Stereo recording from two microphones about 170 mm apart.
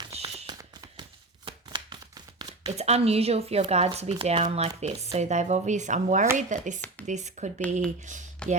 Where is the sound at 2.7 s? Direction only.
40° right (ahead or behind).